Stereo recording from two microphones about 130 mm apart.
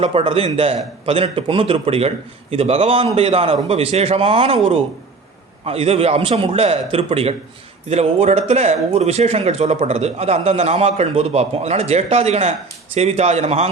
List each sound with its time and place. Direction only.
0.0 s a man's voice: 45° right (ahead or behind)